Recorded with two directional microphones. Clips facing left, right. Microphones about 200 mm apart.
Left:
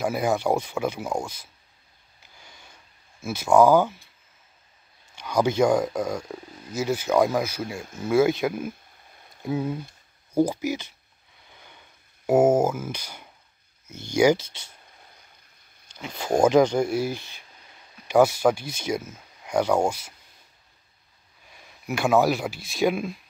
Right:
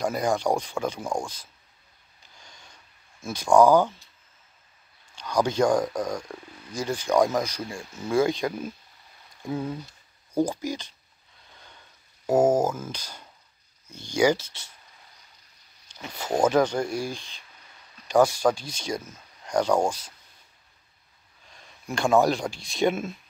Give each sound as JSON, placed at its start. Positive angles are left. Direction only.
{"t": 0.0, "sound": "speech", "side_deg": 5}
{"t": 2.4, "sound": "a sound", "side_deg": 5}
{"t": 5.1, "sound": "speech", "side_deg": 10}
{"t": 7.8, "sound": "speech", "side_deg": 50}
{"t": 8.1, "sound": "speech", "side_deg": 5}
{"t": 11.4, "sound": "a sound", "side_deg": 15}
{"t": 12.3, "sound": "speech", "side_deg": 10}
{"t": 16.2, "sound": "speech", "side_deg": 10}
{"t": 21.5, "sound": "speech", "side_deg": 10}